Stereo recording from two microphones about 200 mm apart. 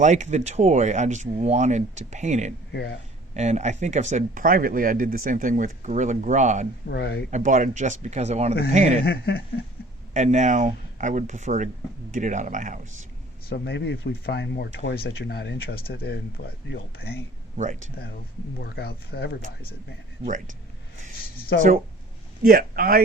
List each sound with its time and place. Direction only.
0.0 s speech: 35° right (ahead or behind)
2.7 s speech: 55° left (ahead or behind)
3.3 s speech: 35° right (ahead or behind)
6.8 s speech: 55° left (ahead or behind)
7.3 s speech: 40° right (ahead or behind)
9.0 s speech: 55° left (ahead or behind)
10.2 s speech: 35° right (ahead or behind)
13.5 s speech: 60° left (ahead or behind)
17.6 s speech: 40° right (ahead or behind)
18.6 s speech: 55° left (ahead or behind)
20.2 s speech: 40° right (ahead or behind)
21.5 s speech: 60° left (ahead or behind)
22.4 s a man's voice: 45° right (ahead or behind)